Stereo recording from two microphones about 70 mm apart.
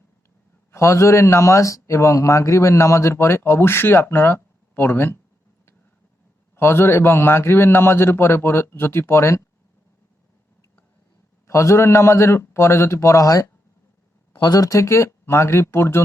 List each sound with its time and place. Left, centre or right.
0.7 s a man's voice: left
6.6 s a man's voice: left
11.4 s a man's voice: left